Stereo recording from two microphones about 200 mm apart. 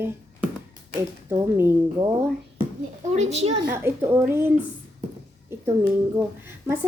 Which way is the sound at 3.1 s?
35° right (ahead or behind).